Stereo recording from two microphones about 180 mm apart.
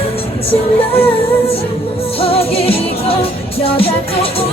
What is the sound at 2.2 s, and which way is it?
Music, 30° left (ahead or behind).